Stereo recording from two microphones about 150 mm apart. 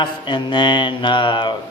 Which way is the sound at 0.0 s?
30° left (ahead or behind).